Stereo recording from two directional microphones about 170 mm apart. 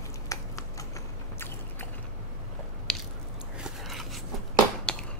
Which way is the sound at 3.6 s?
Centre (ahead or behind).